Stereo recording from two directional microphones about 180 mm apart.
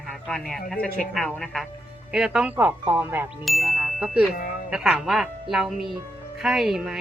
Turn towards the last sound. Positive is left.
turn(degrees=0)  # may be behind; listen again after turning